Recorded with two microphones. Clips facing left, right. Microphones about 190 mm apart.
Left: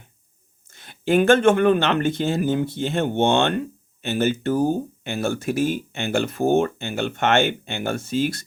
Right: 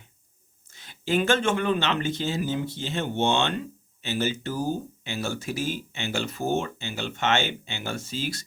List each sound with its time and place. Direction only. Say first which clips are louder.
0.7 s speech: left 6 dB; 55° left (ahead or behind)